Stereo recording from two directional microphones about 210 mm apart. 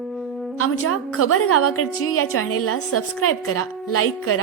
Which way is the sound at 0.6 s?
90° left.